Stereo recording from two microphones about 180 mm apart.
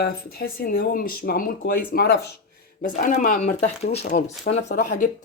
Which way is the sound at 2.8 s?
45° left (ahead or behind).